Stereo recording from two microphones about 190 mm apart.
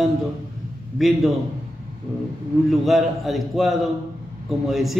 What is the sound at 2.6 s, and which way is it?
Speech, centre (ahead or behind).